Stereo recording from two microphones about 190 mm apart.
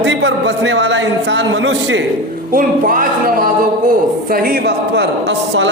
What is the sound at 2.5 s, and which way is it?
Speech, 50° right (ahead or behind).